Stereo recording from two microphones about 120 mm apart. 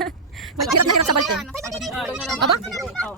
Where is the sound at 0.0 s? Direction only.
Centre (ahead or behind).